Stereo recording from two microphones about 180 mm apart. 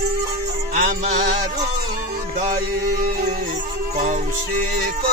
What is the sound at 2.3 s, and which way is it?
Music, 50° right (ahead or behind).